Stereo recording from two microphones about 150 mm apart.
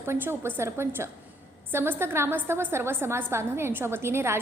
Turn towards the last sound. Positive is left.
turn(degrees=-15)  # may be behind; listen again after turning